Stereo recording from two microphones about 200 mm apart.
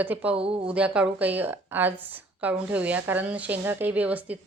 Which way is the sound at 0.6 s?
5° right (ahead or behind).